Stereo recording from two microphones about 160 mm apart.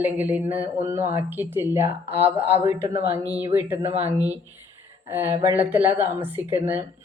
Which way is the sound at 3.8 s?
40° right (ahead or behind).